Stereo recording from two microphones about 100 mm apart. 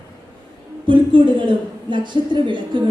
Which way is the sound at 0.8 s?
55° right (ahead or behind).